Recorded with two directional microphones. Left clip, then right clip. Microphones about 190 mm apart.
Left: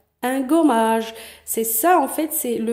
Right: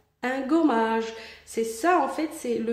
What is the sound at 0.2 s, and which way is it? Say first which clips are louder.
A woman's voice: left 5 dB; 40° left (ahead or behind).